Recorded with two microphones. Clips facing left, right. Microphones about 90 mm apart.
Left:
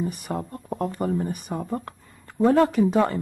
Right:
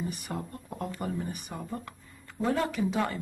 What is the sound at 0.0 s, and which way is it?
Speech, 45° left (ahead or behind).